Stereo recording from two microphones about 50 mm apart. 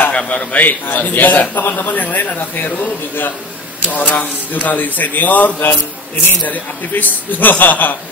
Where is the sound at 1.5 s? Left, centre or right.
Left.